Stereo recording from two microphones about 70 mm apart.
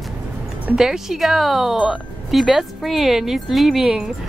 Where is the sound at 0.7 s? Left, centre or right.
Centre.